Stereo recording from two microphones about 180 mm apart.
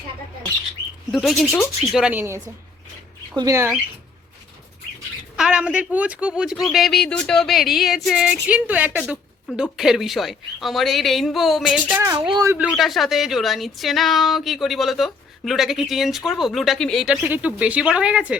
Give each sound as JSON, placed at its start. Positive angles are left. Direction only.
{"t": 1.1, "sound": "speech", "side_deg": 0}
{"t": 5.4, "sound": "speech", "side_deg": -5}
{"t": 12.1, "sound": "speech", "side_deg": -25}
{"t": 12.6, "sound": "speech", "side_deg": 0}